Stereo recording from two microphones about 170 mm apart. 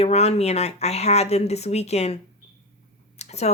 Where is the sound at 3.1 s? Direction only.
40° left (ahead or behind).